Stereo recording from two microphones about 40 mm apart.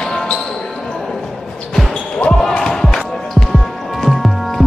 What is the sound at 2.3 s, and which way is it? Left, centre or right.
Music, centre.